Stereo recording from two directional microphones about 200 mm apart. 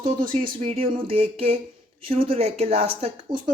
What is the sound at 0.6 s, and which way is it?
Speech, 30° right (ahead or behind).